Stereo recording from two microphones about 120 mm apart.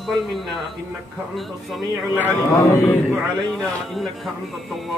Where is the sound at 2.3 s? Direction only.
15° left (ahead or behind).